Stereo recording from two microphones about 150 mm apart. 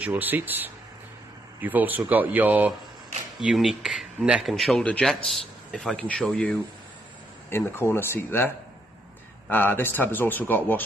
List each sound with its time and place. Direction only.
0.0 s a man's voice: 10° right (ahead or behind); by 10.8 s 10° left (ahead or behind)